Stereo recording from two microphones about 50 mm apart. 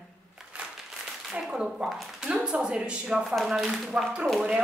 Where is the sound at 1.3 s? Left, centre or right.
Centre.